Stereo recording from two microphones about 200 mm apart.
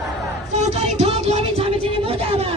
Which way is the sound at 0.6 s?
35° right (ahead or behind).